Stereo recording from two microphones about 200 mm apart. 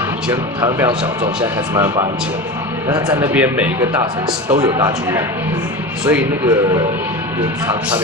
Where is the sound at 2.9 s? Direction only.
20° right (ahead or behind).